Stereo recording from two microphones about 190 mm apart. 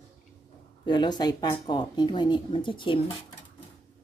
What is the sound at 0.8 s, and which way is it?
A woman's voice, 25° left (ahead or behind).